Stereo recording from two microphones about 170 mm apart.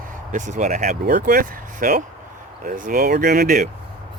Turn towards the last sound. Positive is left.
turn(degrees=-55)  # may be behind; listen again after turning